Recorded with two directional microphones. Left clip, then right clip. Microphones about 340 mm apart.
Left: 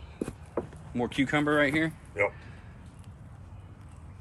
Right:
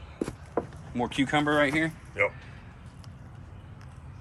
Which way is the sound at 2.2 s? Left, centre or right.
Centre.